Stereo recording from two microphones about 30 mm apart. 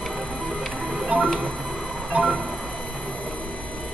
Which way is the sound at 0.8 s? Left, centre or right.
Right.